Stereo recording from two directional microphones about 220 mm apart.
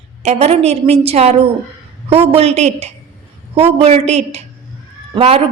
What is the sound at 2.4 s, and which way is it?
Speech, 30° right (ahead or behind).